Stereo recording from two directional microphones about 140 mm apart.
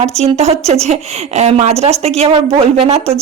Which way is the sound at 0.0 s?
50° right (ahead or behind).